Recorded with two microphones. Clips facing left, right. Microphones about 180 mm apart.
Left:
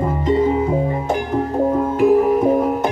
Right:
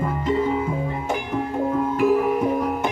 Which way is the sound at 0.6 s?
35° left (ahead or behind).